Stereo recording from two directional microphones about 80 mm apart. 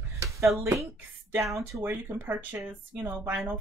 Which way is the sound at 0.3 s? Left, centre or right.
Right.